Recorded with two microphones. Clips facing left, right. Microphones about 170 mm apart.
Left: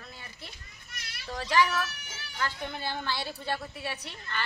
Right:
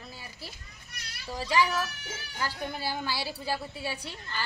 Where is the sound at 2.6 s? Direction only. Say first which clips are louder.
Right 2 dB; 10° right (ahead or behind).